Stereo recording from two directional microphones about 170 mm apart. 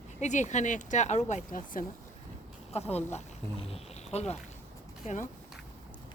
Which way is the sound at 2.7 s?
40° left (ahead or behind).